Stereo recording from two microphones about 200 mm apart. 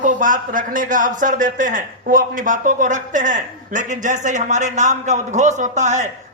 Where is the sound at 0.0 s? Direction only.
40° right (ahead or behind).